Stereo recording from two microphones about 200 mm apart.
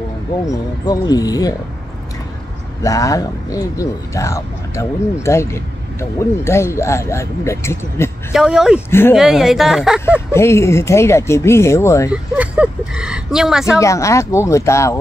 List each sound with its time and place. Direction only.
0.5 s speech: 20° left (ahead or behind)
2.8 s speech: 15° left (ahead or behind)
8.3 s speech: 5° right (ahead or behind)
10.3 s speech: 15° left (ahead or behind)
12.1 s a sound: 5° right (ahead or behind)
13.7 s speech: 15° left (ahead or behind)